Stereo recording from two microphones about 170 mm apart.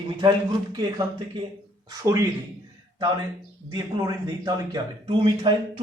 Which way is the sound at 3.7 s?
25° right (ahead or behind).